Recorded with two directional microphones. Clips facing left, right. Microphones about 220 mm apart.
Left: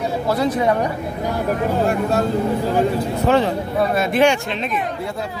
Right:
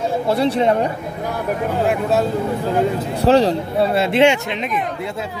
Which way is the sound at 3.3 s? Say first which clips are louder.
Right 4 dB; 35° right (ahead or behind).